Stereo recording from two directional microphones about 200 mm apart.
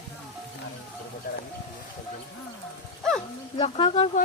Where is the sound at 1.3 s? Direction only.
50° left (ahead or behind).